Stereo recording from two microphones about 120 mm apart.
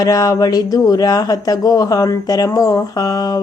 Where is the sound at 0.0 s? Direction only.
30° left (ahead or behind).